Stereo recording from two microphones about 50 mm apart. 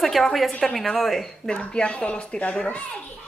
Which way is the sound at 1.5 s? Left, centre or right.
Left.